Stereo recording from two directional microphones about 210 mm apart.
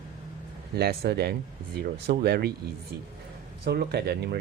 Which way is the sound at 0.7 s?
50° right (ahead or behind).